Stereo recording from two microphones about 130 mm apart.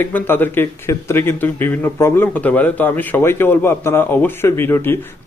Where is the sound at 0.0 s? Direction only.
15° left (ahead or behind).